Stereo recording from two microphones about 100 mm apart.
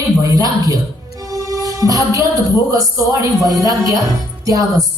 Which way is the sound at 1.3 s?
35° right (ahead or behind).